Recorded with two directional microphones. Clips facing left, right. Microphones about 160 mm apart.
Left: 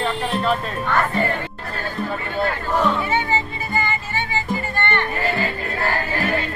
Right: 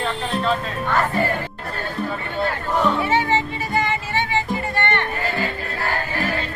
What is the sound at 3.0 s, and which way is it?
Music, 90° right.